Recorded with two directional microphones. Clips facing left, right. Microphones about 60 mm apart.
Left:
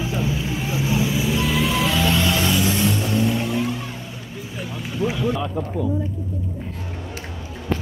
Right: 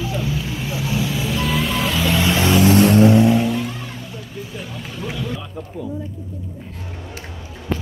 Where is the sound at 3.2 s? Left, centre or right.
Centre.